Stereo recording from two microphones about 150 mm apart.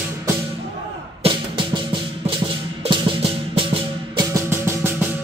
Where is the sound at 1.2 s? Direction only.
35° right (ahead or behind).